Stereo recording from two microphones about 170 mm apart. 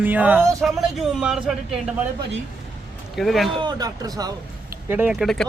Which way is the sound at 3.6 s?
25° right (ahead or behind).